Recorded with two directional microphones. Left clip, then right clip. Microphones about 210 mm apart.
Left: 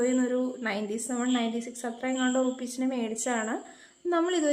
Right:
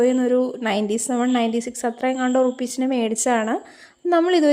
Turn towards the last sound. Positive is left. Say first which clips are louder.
# right 9 dB
turn(degrees=-35)  # may be behind; listen again after turning